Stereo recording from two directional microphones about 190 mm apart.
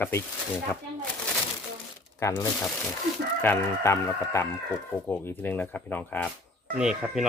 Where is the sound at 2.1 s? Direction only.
15° left (ahead or behind).